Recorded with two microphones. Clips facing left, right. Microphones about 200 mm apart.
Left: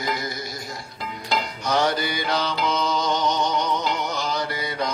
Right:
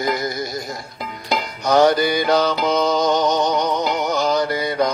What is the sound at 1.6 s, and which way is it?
Music, 40° right (ahead or behind).